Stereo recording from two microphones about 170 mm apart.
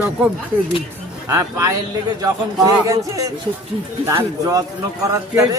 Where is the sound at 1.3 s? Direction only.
20° right (ahead or behind).